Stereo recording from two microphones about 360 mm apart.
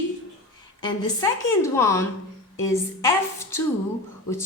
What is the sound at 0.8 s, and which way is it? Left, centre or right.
A woman's voice, centre.